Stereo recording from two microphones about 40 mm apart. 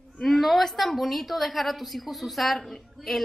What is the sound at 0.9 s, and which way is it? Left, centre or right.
A woman's voice, centre.